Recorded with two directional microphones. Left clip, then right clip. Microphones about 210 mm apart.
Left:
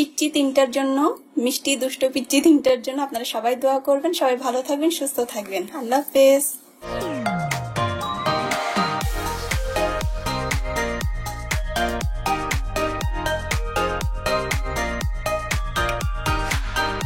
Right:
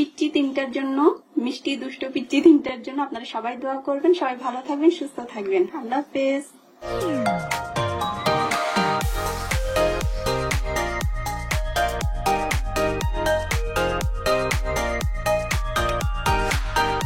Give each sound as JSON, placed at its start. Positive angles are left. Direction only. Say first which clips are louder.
{"t": 0.2, "sound": "speech", "louder": "left 7 dB", "side_deg": 45}
{"t": 7.0, "sound": "music", "louder": "right 2 dB", "side_deg": 0}